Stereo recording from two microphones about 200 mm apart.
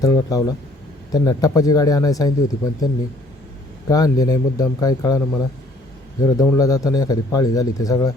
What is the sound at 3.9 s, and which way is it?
Speech, 15° left (ahead or behind).